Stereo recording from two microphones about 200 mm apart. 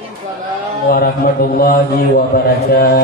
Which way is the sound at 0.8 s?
50° left (ahead or behind).